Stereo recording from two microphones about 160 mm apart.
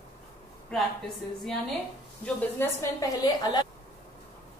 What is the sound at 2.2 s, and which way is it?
A woman's voice, 15° left (ahead or behind).